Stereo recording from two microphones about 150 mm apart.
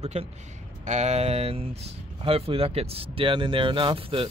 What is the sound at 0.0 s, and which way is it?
Speech, 45° right (ahead or behind).